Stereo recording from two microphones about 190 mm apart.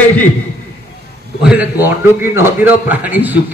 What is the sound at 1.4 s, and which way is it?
A man's voice, 10° right (ahead or behind).